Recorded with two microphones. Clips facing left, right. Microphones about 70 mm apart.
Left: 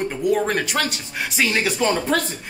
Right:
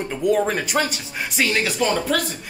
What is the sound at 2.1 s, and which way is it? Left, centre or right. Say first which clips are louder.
Speech: left 1 dB; left.